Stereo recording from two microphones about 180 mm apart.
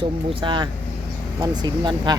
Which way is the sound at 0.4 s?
25° right (ahead or behind).